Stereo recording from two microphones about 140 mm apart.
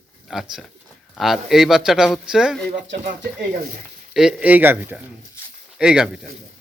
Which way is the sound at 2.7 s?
70° right (ahead or behind).